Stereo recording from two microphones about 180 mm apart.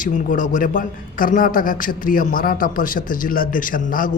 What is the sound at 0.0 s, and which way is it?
Speech, 45° left (ahead or behind).